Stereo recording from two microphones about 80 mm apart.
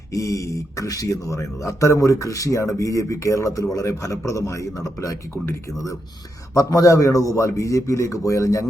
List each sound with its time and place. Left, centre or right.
0.1 s speech: left
6.5 s speech: left